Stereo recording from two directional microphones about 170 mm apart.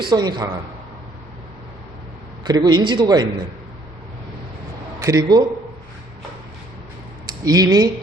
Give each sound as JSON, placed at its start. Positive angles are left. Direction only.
{"t": 0.0, "sound": "a man's voice", "side_deg": -25}
{"t": 2.5, "sound": "a man's voice", "side_deg": -25}
{"t": 4.9, "sound": "a man's voice", "side_deg": -20}
{"t": 7.3, "sound": "speech", "side_deg": -20}